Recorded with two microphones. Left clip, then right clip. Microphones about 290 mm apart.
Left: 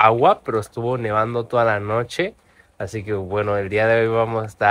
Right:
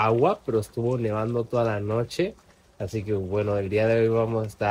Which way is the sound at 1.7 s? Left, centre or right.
Centre.